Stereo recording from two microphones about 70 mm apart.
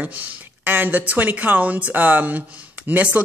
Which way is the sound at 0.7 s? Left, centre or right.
Right.